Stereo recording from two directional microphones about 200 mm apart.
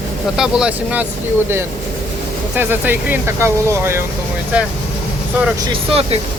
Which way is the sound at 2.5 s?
10° right (ahead or behind).